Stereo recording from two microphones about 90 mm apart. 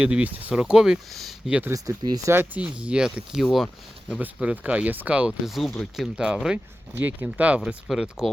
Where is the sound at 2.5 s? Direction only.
15° right (ahead or behind).